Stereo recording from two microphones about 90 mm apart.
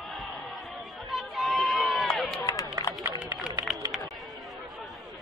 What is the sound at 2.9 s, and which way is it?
Run, 35° left (ahead or behind).